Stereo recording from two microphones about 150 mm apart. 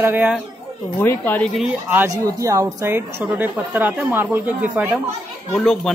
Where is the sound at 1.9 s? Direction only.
15° right (ahead or behind).